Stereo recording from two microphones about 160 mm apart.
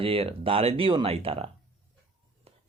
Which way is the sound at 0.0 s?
35° right (ahead or behind).